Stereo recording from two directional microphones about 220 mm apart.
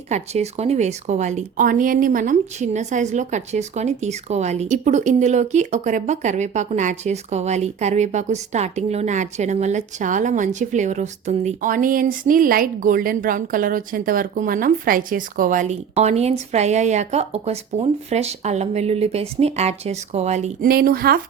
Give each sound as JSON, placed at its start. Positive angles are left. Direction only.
{"t": 0.1, "sound": "speech", "side_deg": -30}